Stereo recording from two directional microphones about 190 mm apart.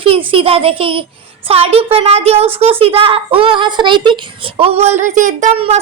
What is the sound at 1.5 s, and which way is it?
Speech, 30° right (ahead or behind).